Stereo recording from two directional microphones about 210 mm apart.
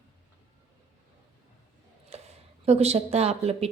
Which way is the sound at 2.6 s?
30° right (ahead or behind).